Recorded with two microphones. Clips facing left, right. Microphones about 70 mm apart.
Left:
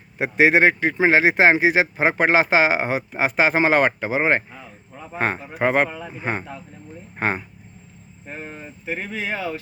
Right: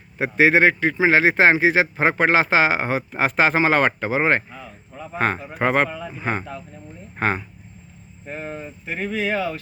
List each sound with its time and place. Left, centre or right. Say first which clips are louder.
0.2 s speech: even; left
8.3 s speech: right 4 dB; centre
8.9 s speech: right 3 dB; centre